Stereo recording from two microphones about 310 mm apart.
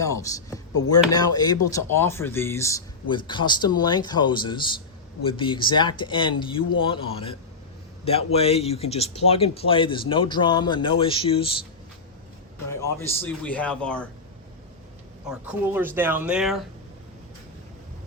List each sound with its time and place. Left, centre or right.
0.0 s speech: centre
12.7 s speech: centre
15.3 s speech: centre